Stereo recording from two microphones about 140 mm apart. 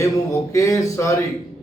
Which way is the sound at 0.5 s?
20° left (ahead or behind).